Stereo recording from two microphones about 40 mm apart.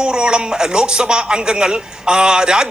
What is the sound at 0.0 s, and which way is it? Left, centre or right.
Speech, right.